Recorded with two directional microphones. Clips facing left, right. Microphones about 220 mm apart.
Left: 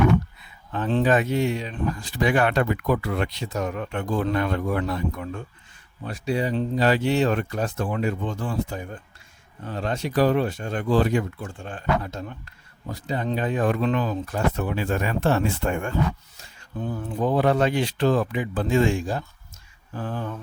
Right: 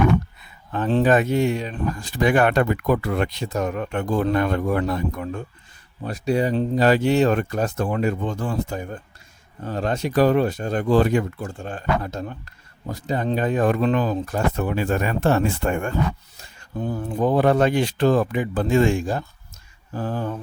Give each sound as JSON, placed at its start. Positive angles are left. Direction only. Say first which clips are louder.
{"t": 0.7, "sound": "speech", "louder": "right 3 dB", "side_deg": -45}
{"t": 19.9, "sound": "mantra", "louder": "right 4 dB", "side_deg": -40}